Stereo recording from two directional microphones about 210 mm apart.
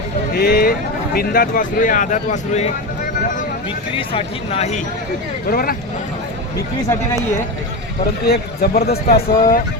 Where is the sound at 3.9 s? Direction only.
30° left (ahead or behind).